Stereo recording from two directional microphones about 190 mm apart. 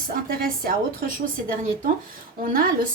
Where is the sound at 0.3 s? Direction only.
50° right (ahead or behind).